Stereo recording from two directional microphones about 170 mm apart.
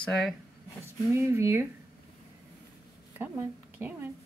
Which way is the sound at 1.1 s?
15° right (ahead or behind).